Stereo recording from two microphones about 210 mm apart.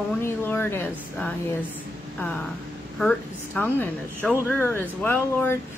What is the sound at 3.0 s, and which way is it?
A woman's voice, 5° left (ahead or behind).